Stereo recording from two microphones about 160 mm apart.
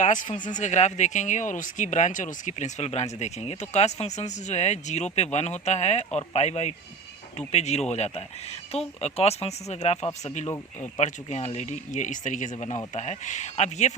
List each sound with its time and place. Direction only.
0.0 s speech: 50° left (ahead or behind)